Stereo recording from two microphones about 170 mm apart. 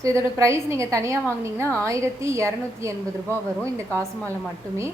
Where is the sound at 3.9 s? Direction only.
10° left (ahead or behind).